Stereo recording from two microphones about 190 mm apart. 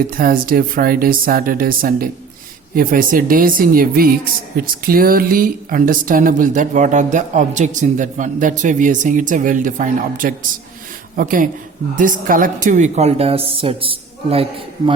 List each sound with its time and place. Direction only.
0.1 s a woman's voice: 50° right (ahead or behind); by 14.4 s 30° right (ahead or behind)